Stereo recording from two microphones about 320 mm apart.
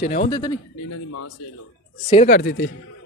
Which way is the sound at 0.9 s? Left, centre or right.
Left.